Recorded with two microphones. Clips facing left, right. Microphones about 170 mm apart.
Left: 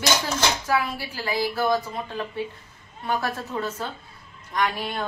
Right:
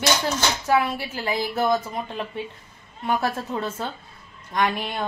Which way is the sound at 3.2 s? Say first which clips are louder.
Right 2 dB; 30° right (ahead or behind).